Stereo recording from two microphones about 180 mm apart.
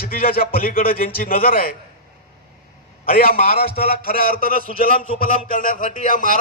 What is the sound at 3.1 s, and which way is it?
A man's voice, 55° left (ahead or behind).